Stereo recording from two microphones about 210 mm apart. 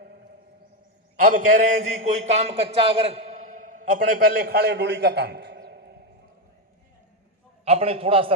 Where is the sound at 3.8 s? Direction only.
45° right (ahead or behind).